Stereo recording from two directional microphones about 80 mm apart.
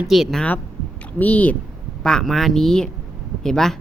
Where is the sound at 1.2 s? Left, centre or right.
Centre.